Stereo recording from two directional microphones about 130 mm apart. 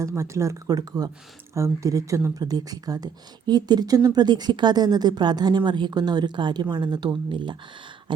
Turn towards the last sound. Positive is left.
turn(degrees=-35)  # may be behind; listen again after turning